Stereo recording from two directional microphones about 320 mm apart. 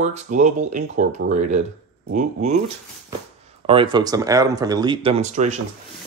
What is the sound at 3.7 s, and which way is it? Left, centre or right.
Speech, centre.